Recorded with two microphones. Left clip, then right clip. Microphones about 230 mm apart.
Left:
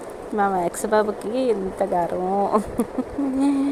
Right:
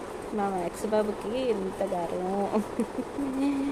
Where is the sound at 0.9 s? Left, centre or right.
Left.